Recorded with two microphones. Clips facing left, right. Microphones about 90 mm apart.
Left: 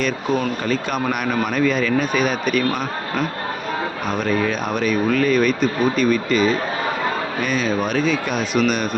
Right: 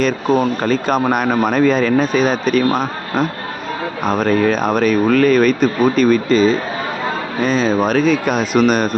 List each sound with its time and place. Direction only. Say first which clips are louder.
0.0 s speech: right 6 dB; 40° right (ahead or behind)